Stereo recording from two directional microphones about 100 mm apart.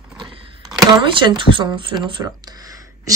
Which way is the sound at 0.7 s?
50° right (ahead or behind).